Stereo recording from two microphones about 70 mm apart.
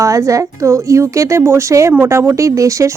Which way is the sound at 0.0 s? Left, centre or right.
Right.